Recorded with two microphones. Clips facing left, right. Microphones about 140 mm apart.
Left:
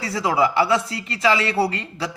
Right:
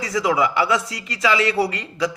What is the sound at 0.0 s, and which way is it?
A man's voice, 30° left (ahead or behind).